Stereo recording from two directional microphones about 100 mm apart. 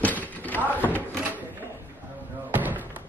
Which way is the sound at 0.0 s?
15° left (ahead or behind).